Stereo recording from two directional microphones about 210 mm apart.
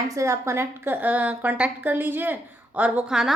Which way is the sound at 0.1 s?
15° right (ahead or behind).